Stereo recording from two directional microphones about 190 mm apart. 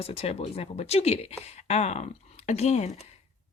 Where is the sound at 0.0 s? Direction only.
30° left (ahead or behind).